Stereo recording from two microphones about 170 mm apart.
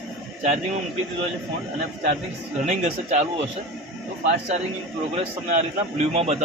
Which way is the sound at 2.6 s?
40° right (ahead or behind).